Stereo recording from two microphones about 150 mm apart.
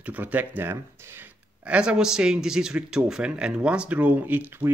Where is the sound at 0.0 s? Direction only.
10° right (ahead or behind).